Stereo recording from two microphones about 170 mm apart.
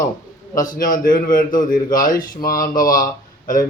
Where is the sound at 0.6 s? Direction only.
50° left (ahead or behind).